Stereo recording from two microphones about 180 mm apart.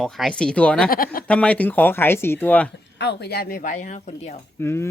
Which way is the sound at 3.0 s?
70° left (ahead or behind).